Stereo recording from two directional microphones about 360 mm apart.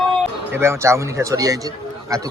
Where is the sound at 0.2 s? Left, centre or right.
Centre.